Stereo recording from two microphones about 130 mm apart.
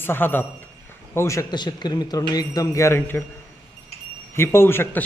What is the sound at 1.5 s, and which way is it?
A man's voice, 35° left (ahead or behind).